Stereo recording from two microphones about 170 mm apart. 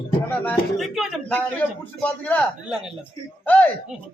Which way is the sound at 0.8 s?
Centre (ahead or behind).